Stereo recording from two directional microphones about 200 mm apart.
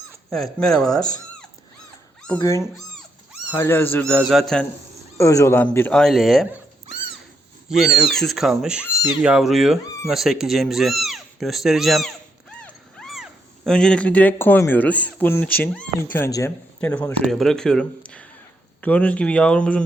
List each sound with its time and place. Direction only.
0.3 s speech: centre (ahead or behind)
0.9 s speech: 20° left (ahead or behind)
2.4 s speech: 15° left (ahead or behind)
2.7 s cat: centre (ahead or behind)
3.6 s speech: 10° left (ahead or behind)
5.1 s speech: 15° left (ahead or behind)
7.7 s speech: centre (ahead or behind)
12.5 s dog: 5° left (ahead or behind)
13.7 s speech: 5° left (ahead or behind)